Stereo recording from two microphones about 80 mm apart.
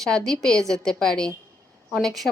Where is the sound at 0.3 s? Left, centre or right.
Centre.